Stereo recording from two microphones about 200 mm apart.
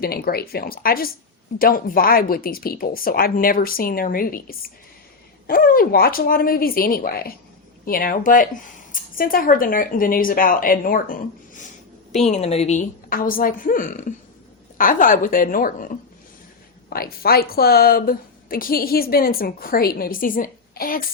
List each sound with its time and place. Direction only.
0.0 s speech: 50° left (ahead or behind)
12.1 s a woman's voice: 35° left (ahead or behind)
16.9 s speech: 50° left (ahead or behind)